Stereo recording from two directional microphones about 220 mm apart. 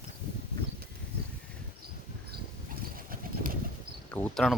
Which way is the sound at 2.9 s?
40° right (ahead or behind).